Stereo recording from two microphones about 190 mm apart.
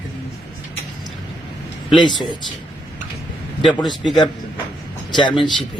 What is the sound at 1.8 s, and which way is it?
Speech, 25° left (ahead or behind).